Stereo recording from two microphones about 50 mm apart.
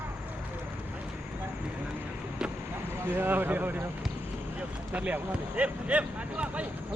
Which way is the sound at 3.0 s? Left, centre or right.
Right.